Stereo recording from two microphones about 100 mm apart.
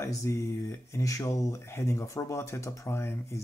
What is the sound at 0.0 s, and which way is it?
Speech, 30° left (ahead or behind).